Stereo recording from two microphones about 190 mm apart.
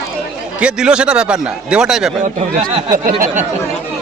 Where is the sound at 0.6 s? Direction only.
5° right (ahead or behind).